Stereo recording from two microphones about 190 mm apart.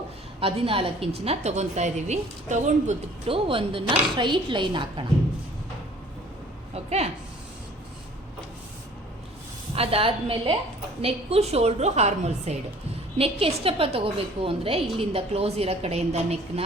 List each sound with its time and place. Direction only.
0.3 s a woman's voice: 30° right (ahead or behind)
6.7 s a sound: 35° right (ahead or behind)
9.7 s a woman's voice: 30° right (ahead or behind)